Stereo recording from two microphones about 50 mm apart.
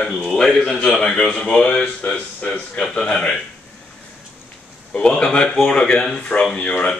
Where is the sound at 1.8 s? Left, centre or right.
Left.